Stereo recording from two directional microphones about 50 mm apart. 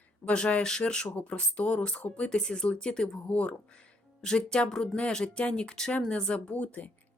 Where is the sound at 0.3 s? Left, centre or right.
Left.